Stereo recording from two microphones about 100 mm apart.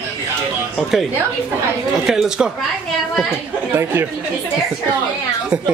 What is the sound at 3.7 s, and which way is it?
Speech, 25° right (ahead or behind).